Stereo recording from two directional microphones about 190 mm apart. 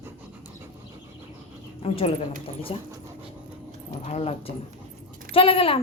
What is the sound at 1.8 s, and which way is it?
Speech, 30° left (ahead or behind).